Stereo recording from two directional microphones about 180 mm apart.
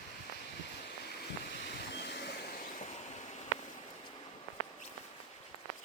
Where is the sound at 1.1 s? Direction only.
70° left (ahead or behind).